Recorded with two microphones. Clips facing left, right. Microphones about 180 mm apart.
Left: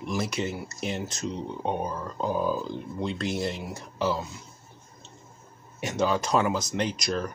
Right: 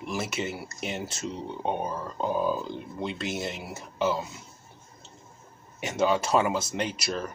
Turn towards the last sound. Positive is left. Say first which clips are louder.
# left 2 dB
turn(degrees=-5)  # may be behind; listen again after turning